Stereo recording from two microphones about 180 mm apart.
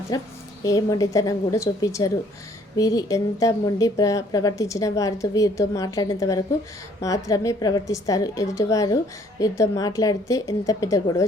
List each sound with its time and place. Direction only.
0.1 s a woman's voice: 20° left (ahead or behind)